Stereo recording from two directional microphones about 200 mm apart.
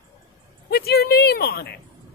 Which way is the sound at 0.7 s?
50° left (ahead or behind).